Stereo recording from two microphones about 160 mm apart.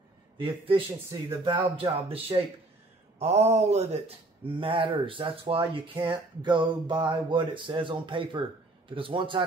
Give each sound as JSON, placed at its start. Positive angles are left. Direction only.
{"t": 0.4, "sound": "speech", "side_deg": -35}
{"t": 4.5, "sound": "speech", "side_deg": -30}